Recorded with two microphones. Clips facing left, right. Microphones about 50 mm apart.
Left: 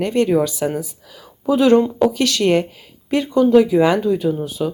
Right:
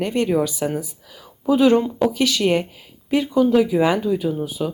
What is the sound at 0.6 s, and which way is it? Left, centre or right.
Speech, centre.